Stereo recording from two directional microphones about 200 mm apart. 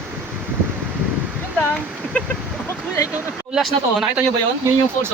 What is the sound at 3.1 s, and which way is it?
Speech, centre (ahead or behind).